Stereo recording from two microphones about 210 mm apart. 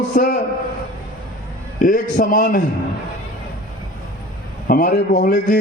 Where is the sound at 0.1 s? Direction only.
40° left (ahead or behind).